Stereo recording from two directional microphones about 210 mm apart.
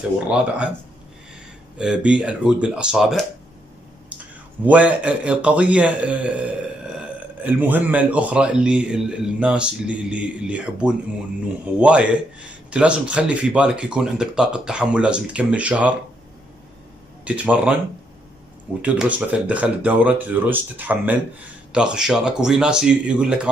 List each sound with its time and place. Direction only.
0.3 s a man's voice: 5° right (ahead or behind)
1.8 s a man's voice: 5° right (ahead or behind)
4.6 s a man's voice: 5° right (ahead or behind)
17.2 s speech: 5° right (ahead or behind)
18.8 s a man's voice: 5° right (ahead or behind)